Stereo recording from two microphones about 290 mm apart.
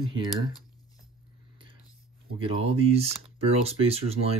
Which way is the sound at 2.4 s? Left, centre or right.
Right.